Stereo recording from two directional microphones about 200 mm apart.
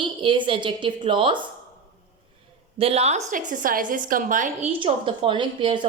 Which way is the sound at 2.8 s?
30° right (ahead or behind).